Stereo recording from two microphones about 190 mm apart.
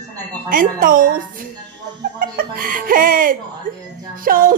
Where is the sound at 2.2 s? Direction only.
50° right (ahead or behind).